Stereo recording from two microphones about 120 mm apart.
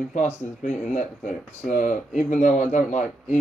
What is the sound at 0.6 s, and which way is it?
Speech, 90° left.